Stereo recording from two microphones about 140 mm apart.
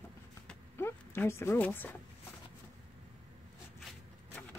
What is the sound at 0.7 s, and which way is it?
Speech, 15° left (ahead or behind).